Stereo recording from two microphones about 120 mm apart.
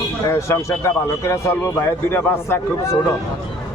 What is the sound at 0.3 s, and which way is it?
A man's voice, 25° left (ahead or behind).